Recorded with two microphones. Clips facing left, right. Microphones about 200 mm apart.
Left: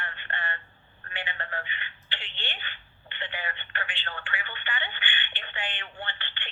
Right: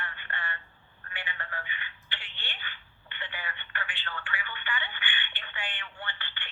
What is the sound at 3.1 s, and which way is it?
Telephone, 25° left (ahead or behind).